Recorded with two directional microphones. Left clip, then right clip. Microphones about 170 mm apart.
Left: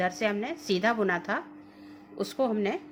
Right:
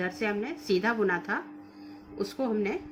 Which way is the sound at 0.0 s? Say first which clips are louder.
Left 3 dB; 25° left (ahead or behind).